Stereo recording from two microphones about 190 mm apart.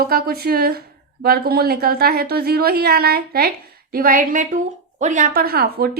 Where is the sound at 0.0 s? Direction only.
50° right (ahead or behind).